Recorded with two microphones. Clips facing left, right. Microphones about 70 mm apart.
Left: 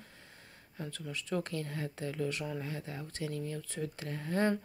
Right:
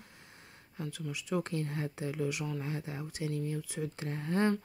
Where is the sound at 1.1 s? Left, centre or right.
Centre.